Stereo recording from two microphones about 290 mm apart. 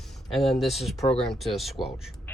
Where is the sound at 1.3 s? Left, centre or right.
Centre.